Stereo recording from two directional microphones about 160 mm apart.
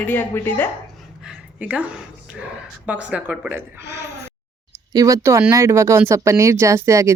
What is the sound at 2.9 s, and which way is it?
Speech, 10° right (ahead or behind).